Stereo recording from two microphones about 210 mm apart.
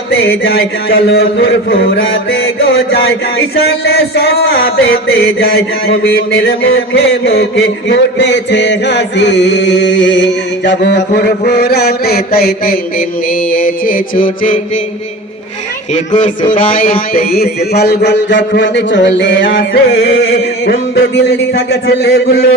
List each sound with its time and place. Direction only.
0.4 s mantra: 50° left (ahead or behind)
2.6 s mantra: 50° left (ahead or behind)
16.1 s mantra: 35° left (ahead or behind)